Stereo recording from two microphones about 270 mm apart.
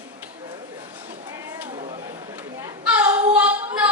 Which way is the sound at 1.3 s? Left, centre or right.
Centre.